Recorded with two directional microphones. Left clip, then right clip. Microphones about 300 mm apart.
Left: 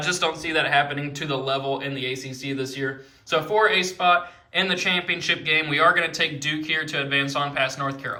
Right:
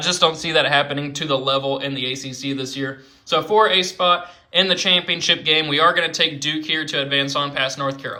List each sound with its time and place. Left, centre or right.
0.0 s speech: centre